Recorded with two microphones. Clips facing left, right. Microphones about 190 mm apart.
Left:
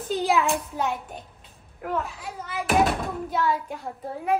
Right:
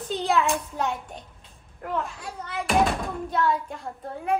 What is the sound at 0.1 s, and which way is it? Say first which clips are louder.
A child's voice: left 1 dB; 5° left (ahead or behind).